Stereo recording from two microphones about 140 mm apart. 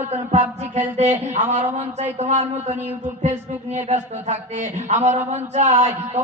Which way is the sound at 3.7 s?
55° right (ahead or behind).